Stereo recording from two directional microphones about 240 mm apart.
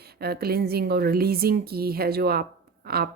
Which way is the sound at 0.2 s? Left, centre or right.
Right.